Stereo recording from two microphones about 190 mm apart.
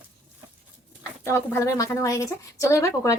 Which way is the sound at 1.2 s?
15° left (ahead or behind).